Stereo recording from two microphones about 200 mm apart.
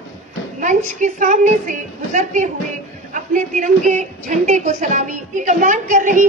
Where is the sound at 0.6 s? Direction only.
40° right (ahead or behind).